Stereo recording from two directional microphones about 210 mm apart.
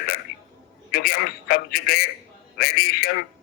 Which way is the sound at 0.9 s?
45° left (ahead or behind).